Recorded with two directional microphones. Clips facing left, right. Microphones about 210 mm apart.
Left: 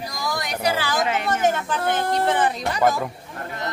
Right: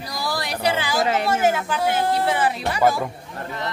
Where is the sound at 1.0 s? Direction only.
35° right (ahead or behind).